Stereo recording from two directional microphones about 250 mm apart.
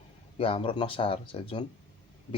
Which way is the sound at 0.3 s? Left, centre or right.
Left.